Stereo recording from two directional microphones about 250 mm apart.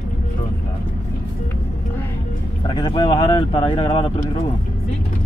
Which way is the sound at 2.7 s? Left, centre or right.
Centre.